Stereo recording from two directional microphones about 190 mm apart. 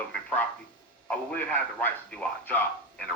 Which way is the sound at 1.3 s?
10° left (ahead or behind).